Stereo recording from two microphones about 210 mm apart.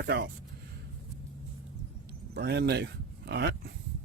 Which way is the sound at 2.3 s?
55° right (ahead or behind).